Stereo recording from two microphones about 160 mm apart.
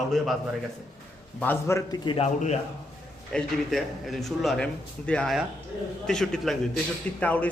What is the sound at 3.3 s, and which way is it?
A man's voice, centre (ahead or behind).